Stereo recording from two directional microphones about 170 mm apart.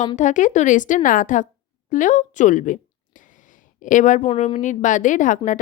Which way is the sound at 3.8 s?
50° left (ahead or behind).